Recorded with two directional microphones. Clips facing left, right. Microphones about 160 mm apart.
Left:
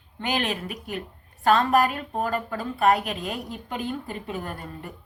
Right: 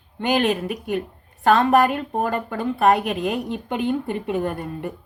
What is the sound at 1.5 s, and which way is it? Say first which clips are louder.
A woman's voice: right 4 dB; 20° right (ahead or behind).